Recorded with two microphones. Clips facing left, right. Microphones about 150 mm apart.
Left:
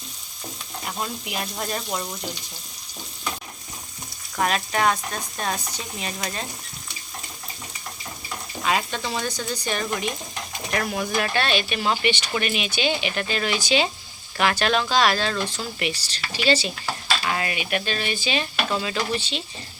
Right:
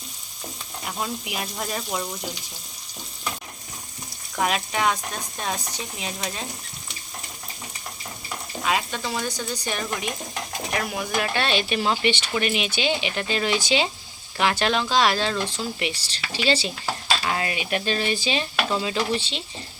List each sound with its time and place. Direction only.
0.9 s speech: 5° right (ahead or behind)
4.4 s speech: 10° right (ahead or behind)
6.0 s speech: 5° right (ahead or behind)
8.6 s speech: 5° right (ahead or behind); by 19.4 s 25° right (ahead or behind)